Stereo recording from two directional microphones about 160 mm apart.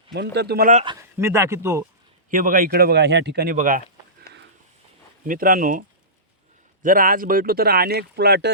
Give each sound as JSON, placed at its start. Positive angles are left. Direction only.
{"t": 0.3, "sound": "speech", "side_deg": -80}
{"t": 1.2, "sound": "speech", "side_deg": -15}
{"t": 2.3, "sound": "speech", "side_deg": -60}
{"t": 5.2, "sound": "speech", "side_deg": -60}
{"t": 6.8, "sound": "speech", "side_deg": -60}